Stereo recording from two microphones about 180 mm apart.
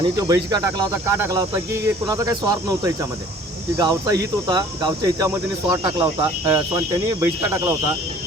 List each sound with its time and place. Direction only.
0.0 s speech: 20° right (ahead or behind)